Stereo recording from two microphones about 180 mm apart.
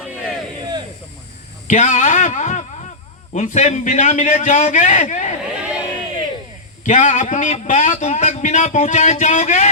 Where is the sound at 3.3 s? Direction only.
45° left (ahead or behind).